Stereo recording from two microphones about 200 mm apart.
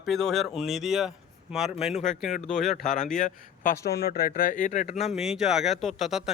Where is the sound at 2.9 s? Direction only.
40° left (ahead or behind).